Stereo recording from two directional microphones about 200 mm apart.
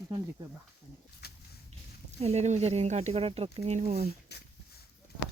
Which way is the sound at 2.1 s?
35° right (ahead or behind).